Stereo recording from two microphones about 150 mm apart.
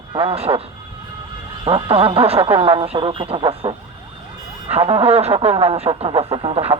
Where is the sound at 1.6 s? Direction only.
40° right (ahead or behind).